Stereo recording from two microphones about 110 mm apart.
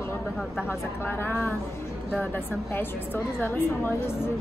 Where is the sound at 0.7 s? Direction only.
20° left (ahead or behind).